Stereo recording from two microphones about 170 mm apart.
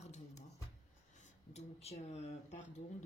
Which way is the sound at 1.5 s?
40° left (ahead or behind).